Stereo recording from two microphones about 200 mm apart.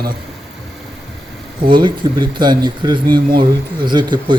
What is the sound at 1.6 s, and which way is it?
Speech, 25° right (ahead or behind).